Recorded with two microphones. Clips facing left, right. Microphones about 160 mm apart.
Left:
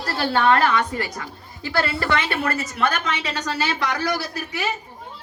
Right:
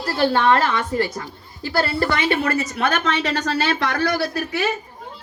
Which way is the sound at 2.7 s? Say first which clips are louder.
Right 3 dB; 55° right (ahead or behind).